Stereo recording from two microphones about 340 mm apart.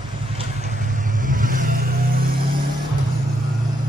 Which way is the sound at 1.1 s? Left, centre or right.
Right.